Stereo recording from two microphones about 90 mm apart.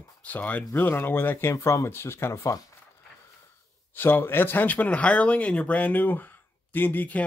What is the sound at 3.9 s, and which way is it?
Speech, 25° left (ahead or behind).